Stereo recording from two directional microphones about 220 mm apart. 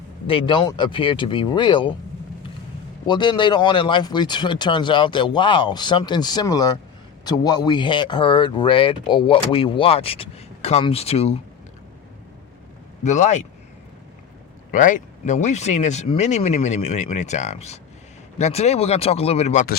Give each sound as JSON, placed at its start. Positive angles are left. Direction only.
{"t": 0.3, "sound": "speech", "side_deg": 25}
{"t": 3.1, "sound": "speech", "side_deg": 20}
{"t": 13.0, "sound": "speech", "side_deg": 35}
{"t": 14.7, "sound": "speech", "side_deg": 35}